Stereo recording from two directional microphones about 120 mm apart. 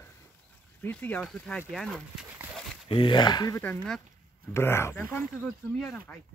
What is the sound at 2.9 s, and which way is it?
Speech, 45° left (ahead or behind).